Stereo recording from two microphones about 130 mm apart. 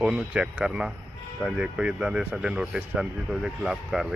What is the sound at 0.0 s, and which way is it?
Speech, 5° right (ahead or behind).